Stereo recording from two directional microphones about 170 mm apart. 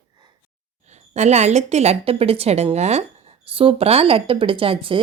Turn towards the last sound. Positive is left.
turn(degrees=-30)  # may be behind; listen again after turning